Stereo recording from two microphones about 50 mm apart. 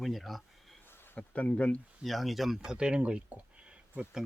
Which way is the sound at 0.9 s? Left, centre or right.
Left.